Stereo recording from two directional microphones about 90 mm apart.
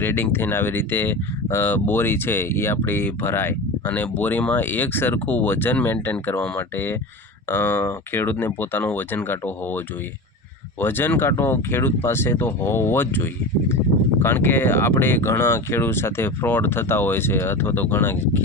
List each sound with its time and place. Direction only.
0.0 s speech: 25° left (ahead or behind)